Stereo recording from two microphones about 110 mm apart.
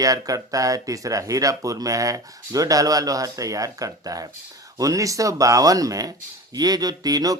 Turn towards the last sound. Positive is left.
turn(degrees=-35)  # may be behind; listen again after turning